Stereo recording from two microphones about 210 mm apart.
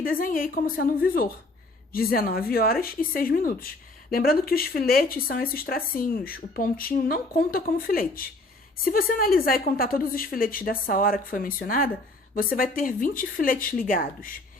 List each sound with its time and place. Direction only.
0.0 s a woman's voice: 40° left (ahead or behind)